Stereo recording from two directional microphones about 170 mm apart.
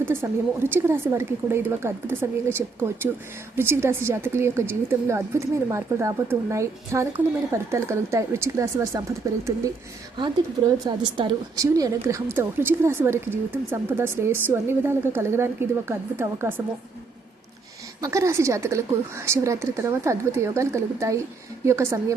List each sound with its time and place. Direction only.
0.0 s a woman's voice: 15° right (ahead or behind)
10.8 s a woman's voice: 25° right (ahead or behind)
18.0 s a woman's voice: 15° right (ahead or behind)